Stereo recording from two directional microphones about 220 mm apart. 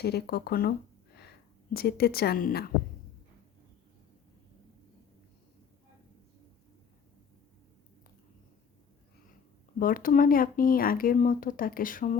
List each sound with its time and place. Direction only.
0.0 s speech: 45° left (ahead or behind)
9.7 s speech: 40° left (ahead or behind)